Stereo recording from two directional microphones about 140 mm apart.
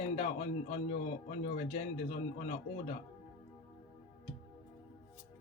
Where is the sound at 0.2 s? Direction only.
55° left (ahead or behind).